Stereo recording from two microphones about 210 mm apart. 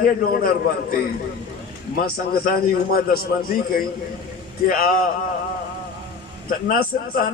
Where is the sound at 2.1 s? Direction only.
45° left (ahead or behind).